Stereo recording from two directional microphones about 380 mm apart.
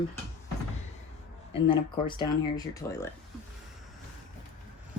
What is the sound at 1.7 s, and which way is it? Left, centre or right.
A woman's voice, centre.